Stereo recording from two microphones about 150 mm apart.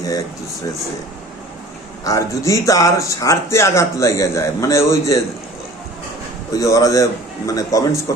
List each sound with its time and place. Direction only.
2.0 s speech: 20° left (ahead or behind)
6.5 s speech: 20° left (ahead or behind)